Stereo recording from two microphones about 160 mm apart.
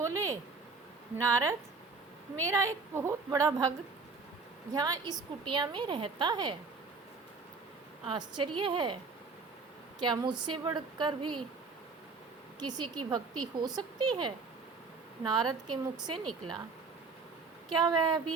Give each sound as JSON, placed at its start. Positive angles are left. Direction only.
{"t": 0.0, "sound": "a sound", "side_deg": -20}
{"t": 1.1, "sound": "a woman's voice", "side_deg": -20}
{"t": 4.7, "sound": "a woman's voice", "side_deg": -25}
{"t": 8.0, "sound": "a woman's voice", "side_deg": -30}
{"t": 10.0, "sound": "a woman's voice", "side_deg": -30}
{"t": 12.5, "sound": "a woman's voice", "side_deg": -25}
{"t": 17.7, "sound": "a woman's voice", "side_deg": -25}